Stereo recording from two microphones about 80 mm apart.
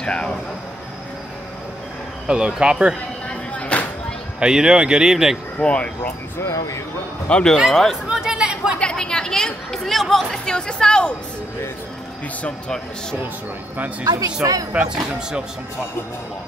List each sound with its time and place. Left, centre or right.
0.0 s speech: centre
2.2 s speech: centre
3.3 s a sound: centre
4.4 s speech: centre
5.6 s speech: centre
6.4 s speech: left
7.2 s speech: centre
7.5 s speech: centre
8.7 s speech: centre
12.4 s speech: centre
14.0 s speech: right
14.7 s speech: centre